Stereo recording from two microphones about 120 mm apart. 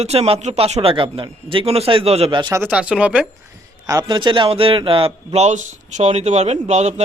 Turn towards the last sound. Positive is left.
turn(degrees=-70)  # may be behind; listen again after turning